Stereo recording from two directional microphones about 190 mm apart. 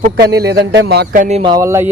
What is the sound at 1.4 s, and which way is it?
Speech, 20° right (ahead or behind).